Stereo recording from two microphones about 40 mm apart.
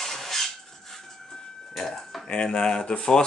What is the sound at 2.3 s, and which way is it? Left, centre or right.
Speech, left.